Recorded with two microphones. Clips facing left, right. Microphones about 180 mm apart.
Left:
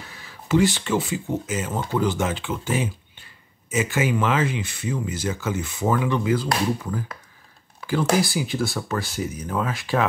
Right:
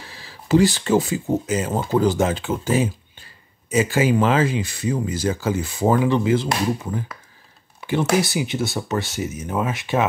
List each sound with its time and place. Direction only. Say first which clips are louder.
0.1 s speech: right 4 dB; 30° right (ahead or behind)